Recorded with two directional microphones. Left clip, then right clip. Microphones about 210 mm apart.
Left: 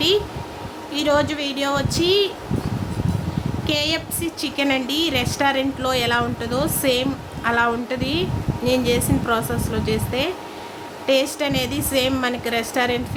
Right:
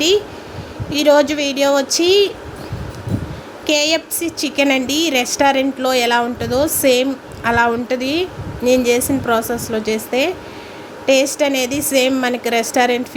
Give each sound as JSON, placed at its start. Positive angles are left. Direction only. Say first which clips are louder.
{"t": 0.9, "sound": "a woman's voice", "louder": "right 7 dB", "side_deg": -20}
{"t": 3.7, "sound": "a woman's voice", "louder": "right 7 dB", "side_deg": -20}